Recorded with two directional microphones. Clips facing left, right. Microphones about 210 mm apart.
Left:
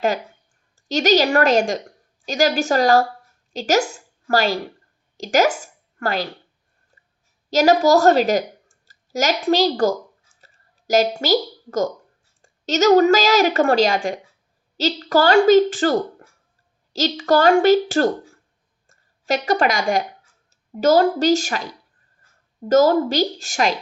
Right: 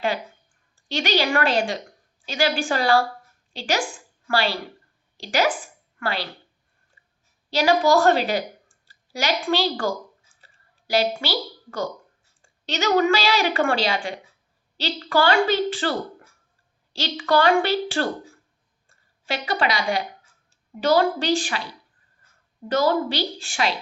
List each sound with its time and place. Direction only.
0.8 s a woman's voice: 40° left (ahead or behind)
6.9 s clicking: 45° left (ahead or behind)
7.5 s a woman's voice: 40° left (ahead or behind)
10.4 s a sound: 45° left (ahead or behind)
12.4 s a woman's voice: 40° left (ahead or behind)